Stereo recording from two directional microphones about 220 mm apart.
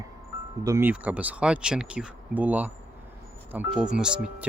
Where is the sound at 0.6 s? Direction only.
10° right (ahead or behind).